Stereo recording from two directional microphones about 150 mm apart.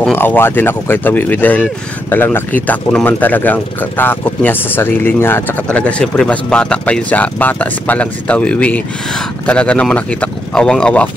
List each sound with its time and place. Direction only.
0.1 s speech: 15° left (ahead or behind)